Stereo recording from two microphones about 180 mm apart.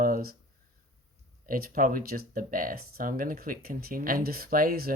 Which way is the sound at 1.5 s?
55° right (ahead or behind).